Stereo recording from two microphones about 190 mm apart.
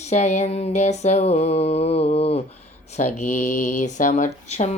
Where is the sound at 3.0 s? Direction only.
40° left (ahead or behind).